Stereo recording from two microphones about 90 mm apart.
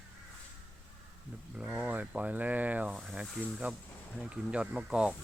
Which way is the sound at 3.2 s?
15° right (ahead or behind).